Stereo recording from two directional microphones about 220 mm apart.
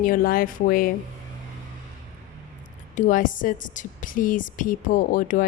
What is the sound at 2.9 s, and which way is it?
Speech, 35° left (ahead or behind).